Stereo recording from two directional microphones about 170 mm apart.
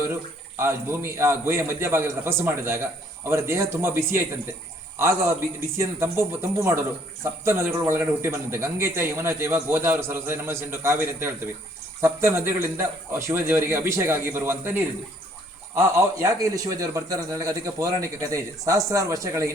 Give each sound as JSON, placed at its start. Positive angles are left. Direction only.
{"t": 0.0, "sound": "a man's voice", "side_deg": -15}